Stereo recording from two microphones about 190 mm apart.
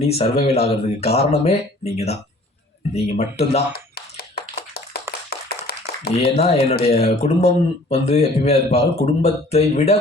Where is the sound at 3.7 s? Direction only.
55° left (ahead or behind).